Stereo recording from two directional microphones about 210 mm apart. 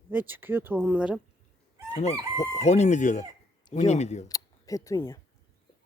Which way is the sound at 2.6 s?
35° left (ahead or behind).